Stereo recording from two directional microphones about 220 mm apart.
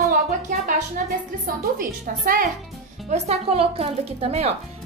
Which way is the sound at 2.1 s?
40° right (ahead or behind).